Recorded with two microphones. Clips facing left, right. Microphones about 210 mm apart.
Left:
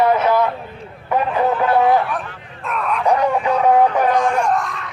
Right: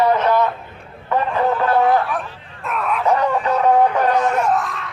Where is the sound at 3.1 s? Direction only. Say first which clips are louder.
Left 1 dB; 15° left (ahead or behind).